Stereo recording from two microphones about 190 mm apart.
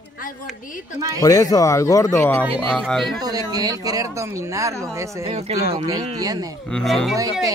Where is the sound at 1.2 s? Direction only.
20° left (ahead or behind).